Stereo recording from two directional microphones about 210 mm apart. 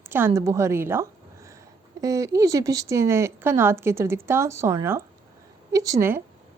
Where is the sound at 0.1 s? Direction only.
10° right (ahead or behind).